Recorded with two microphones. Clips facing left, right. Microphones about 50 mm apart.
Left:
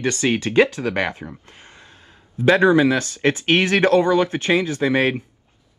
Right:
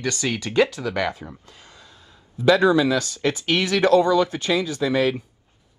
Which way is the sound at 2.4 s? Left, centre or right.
Left.